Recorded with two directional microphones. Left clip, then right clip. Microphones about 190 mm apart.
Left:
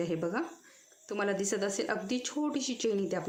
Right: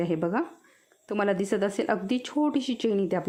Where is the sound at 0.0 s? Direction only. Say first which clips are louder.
Right 5 dB; 45° right (ahead or behind).